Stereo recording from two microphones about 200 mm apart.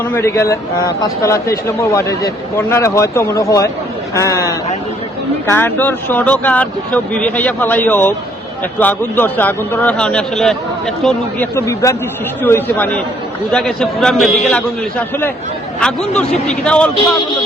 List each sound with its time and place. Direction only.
0.0 s a man's voice: 10° left (ahead or behind)
11.5 s a man's voice: 15° left (ahead or behind)